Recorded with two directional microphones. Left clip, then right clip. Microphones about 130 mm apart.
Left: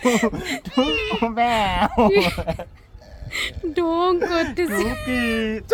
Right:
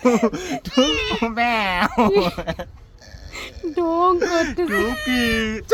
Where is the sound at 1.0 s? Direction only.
25° left (ahead or behind).